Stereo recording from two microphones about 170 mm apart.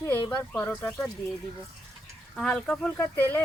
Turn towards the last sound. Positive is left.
turn(degrees=10)  # may be behind; listen again after turning